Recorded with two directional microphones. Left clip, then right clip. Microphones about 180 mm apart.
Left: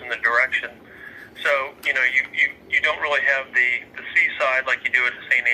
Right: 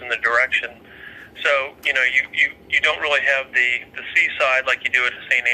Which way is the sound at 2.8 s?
50° right (ahead or behind).